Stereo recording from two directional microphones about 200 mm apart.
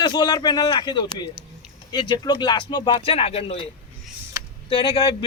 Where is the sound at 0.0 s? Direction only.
20° left (ahead or behind).